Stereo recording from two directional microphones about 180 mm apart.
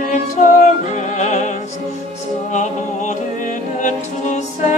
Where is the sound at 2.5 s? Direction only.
40° left (ahead or behind).